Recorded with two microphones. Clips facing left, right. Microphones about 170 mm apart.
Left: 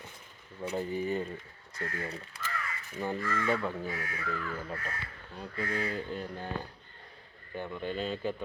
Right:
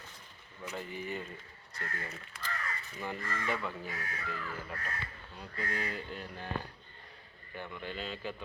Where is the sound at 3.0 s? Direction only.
25° left (ahead or behind).